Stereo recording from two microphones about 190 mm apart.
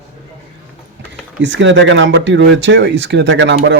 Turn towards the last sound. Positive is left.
turn(degrees=-70)  # may be behind; listen again after turning